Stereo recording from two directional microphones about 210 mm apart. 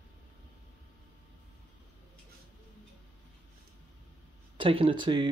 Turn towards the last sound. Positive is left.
turn(degrees=-20)  # may be behind; listen again after turning